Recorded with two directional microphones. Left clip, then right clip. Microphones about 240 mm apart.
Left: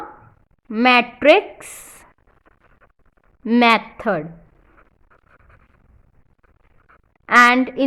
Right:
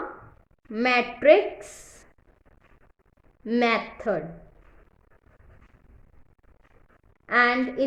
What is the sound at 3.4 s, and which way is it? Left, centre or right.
Speech, left.